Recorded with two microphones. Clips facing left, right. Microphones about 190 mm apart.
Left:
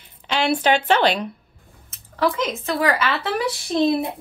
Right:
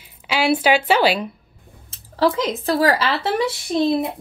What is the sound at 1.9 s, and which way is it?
Speech, 30° right (ahead or behind).